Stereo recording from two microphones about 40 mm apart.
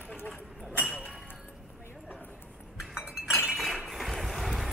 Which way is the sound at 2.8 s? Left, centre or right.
Centre.